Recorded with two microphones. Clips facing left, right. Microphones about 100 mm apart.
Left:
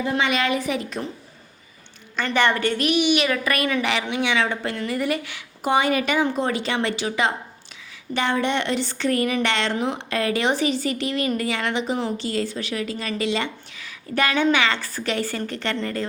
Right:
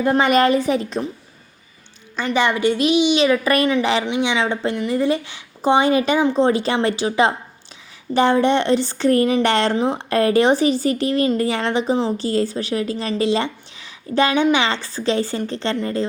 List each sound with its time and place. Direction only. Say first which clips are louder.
0.0 s speech: right 7 dB; 45° right (ahead or behind); by 1.0 s 30° right (ahead or behind)
2.1 s a woman's voice: right 2 dB; 15° right (ahead or behind)